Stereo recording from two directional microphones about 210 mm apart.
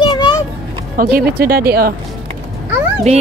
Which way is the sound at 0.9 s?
45° right (ahead or behind).